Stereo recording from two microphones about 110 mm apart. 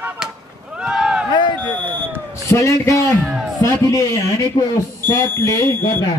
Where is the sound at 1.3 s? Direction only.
45° left (ahead or behind).